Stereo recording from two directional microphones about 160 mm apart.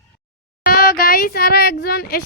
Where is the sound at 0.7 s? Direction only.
70° left (ahead or behind).